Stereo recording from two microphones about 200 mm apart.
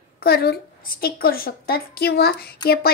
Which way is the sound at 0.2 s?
50° left (ahead or behind).